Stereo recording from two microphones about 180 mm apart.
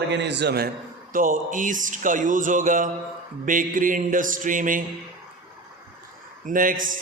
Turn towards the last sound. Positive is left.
turn(degrees=-50)  # may be behind; listen again after turning